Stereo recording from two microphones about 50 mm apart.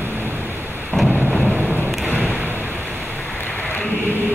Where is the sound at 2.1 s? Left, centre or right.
Right.